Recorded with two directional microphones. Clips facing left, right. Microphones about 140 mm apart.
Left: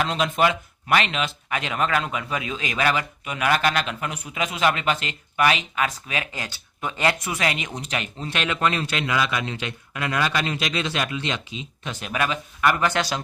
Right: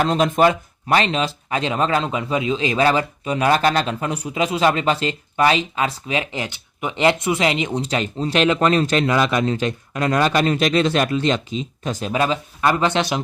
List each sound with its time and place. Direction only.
0.0 s speech: 40° right (ahead or behind); by 13.2 s 20° right (ahead or behind)